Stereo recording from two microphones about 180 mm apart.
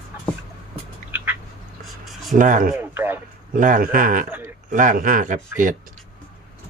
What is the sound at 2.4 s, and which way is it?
Speech, 45° right (ahead or behind).